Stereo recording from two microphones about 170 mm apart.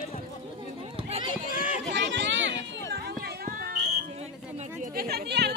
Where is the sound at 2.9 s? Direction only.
65° right (ahead or behind).